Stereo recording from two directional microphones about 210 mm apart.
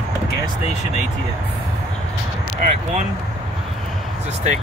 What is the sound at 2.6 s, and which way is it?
Speech, 40° right (ahead or behind).